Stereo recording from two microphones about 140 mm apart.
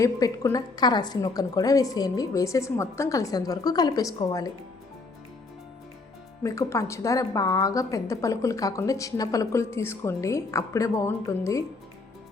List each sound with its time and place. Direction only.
0.0 s a woman's voice: 25° left (ahead or behind)
6.4 s a woman's voice: 20° left (ahead or behind)